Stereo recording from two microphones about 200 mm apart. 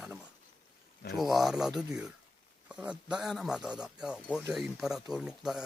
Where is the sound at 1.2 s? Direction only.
Centre (ahead or behind).